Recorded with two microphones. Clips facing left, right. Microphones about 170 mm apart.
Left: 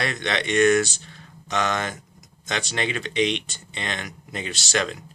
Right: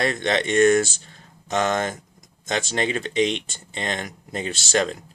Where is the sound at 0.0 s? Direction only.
40° right (ahead or behind).